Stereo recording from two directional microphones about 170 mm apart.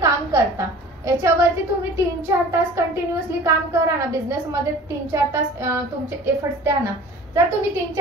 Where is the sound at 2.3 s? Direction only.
15° right (ahead or behind).